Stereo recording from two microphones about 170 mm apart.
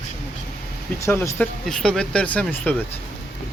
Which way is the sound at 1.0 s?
15° left (ahead or behind).